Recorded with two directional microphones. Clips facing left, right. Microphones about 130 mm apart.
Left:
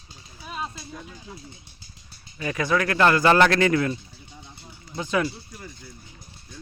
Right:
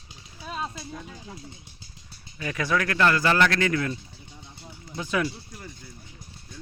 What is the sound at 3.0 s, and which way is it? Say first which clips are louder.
Speech: left 5 dB; 25° left (ahead or behind).